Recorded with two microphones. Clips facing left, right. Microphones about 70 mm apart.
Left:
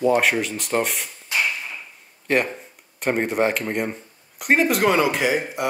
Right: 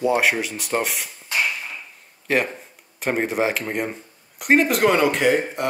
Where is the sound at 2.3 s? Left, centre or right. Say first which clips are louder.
Even; centre.